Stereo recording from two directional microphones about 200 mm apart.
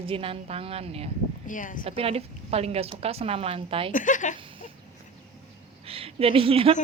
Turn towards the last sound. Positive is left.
turn(degrees=-25)  # may be behind; listen again after turning